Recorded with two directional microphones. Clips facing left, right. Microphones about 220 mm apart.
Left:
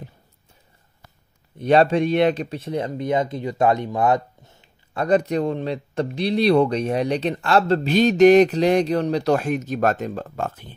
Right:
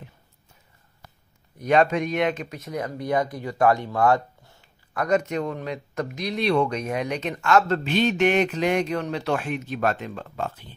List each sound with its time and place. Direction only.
1.6 s speech: 30° left (ahead or behind); by 10.7 s 50° left (ahead or behind)